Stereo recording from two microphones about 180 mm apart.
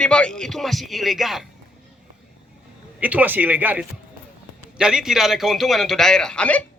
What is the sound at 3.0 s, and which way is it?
A man's voice, 10° right (ahead or behind).